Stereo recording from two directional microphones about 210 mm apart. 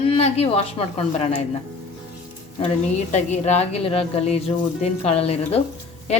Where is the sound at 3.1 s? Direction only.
30° left (ahead or behind).